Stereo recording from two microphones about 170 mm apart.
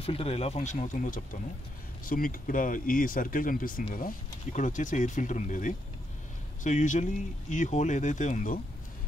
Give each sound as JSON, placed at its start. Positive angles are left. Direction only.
{"t": 0.0, "sound": "speech", "side_deg": 35}